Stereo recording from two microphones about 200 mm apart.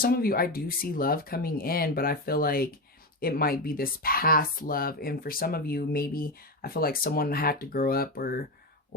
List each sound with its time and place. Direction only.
0.0 s speech: 50° left (ahead or behind)